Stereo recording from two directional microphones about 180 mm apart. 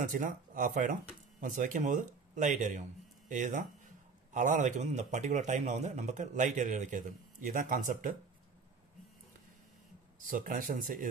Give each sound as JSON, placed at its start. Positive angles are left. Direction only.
{"t": 0.0, "sound": "speech", "side_deg": -45}
{"t": 10.2, "sound": "speech", "side_deg": -50}